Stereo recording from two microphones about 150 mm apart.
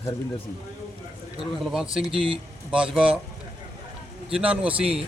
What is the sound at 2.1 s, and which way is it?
Speech, 35° right (ahead or behind).